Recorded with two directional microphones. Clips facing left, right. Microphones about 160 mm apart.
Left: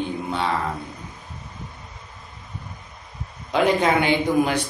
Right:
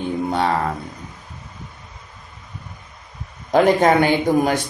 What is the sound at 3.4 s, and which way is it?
Speech, 45° right (ahead or behind).